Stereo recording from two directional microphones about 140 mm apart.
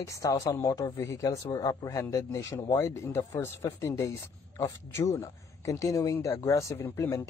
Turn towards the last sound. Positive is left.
turn(degrees=20)  # may be behind; listen again after turning